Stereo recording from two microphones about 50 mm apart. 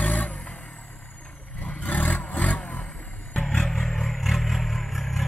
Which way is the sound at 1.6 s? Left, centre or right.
Left.